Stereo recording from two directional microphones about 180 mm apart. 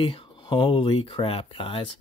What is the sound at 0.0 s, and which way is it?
Speech, 30° left (ahead or behind).